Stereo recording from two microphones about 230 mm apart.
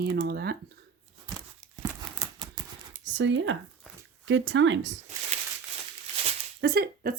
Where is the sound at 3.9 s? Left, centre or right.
Centre.